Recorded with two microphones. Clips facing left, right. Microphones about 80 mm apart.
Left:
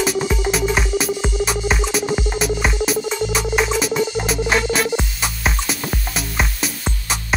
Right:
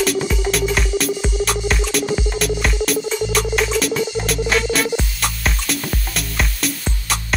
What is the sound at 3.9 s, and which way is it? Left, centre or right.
Music, left.